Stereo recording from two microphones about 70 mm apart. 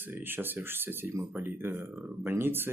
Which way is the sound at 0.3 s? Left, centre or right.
Right.